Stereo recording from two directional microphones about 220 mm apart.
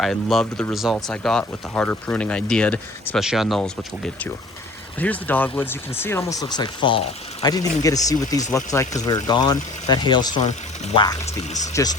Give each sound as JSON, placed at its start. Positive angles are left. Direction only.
{"t": 0.0, "sound": "speech", "side_deg": 0}